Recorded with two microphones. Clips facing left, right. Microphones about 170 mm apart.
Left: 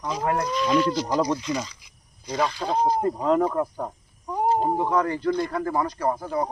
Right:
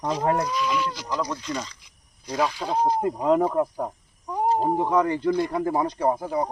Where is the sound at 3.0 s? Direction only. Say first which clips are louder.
Even; 15° right (ahead or behind).